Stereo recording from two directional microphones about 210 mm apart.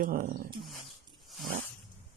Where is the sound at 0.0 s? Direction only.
40° right (ahead or behind).